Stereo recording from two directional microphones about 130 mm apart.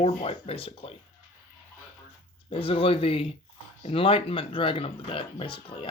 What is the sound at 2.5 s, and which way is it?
Speech, 45° left (ahead or behind).